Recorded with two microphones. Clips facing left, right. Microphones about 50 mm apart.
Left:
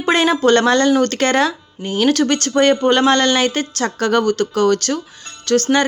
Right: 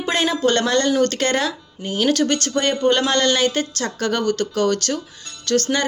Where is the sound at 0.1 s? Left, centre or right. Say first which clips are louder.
Left 6 dB; left.